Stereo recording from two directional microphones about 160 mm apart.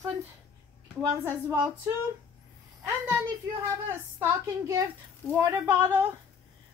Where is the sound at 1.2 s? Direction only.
15° right (ahead or behind).